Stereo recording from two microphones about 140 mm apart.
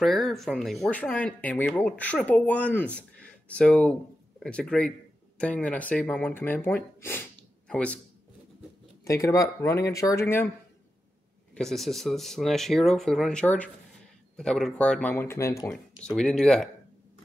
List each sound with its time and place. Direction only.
0.0 s speech: centre (ahead or behind)
3.0 s a sound: 10° left (ahead or behind)
4.4 s speech: 5° left (ahead or behind)
9.0 s speech: 20° left (ahead or behind)
11.5 s speech: 5° left (ahead or behind); by 15.7 s 20° left (ahead or behind)
15.7 s speech: 5° left (ahead or behind)